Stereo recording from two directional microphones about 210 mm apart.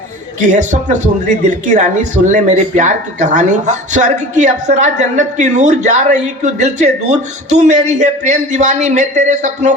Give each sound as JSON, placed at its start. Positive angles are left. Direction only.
{"t": 0.4, "sound": "speech", "side_deg": -35}